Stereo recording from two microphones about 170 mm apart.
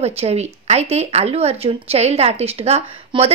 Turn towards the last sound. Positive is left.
turn(degrees=-35)  # may be behind; listen again after turning